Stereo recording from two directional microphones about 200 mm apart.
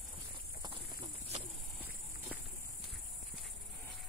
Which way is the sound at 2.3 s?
5° right (ahead or behind).